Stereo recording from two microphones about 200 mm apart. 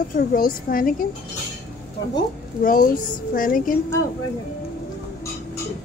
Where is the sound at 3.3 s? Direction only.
45° left (ahead or behind).